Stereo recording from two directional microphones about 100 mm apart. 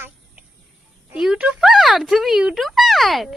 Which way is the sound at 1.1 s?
5° right (ahead or behind).